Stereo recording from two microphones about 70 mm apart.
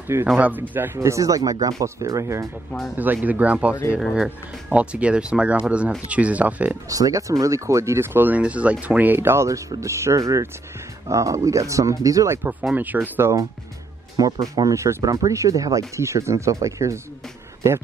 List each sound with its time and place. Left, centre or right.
0.4 s speech: right
0.9 s speech: right
3.0 s speech: right
6.9 s speech: right
8.4 s speech: centre; by 9.5 s right
9.5 s speech: right
12.7 s speech: right
14.1 s speech: right
16.0 s speech: right